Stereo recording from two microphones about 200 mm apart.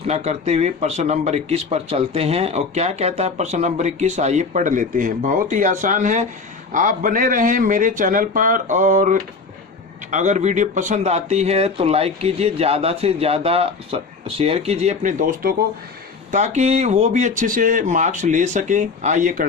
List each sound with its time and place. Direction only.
0.1 s speech: 35° right (ahead or behind)